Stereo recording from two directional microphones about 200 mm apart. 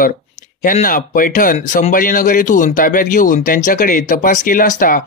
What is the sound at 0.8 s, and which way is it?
Speech, 45° left (ahead or behind).